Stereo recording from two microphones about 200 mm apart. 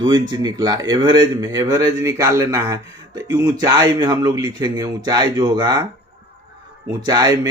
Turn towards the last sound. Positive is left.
turn(degrees=-20)  # may be behind; listen again after turning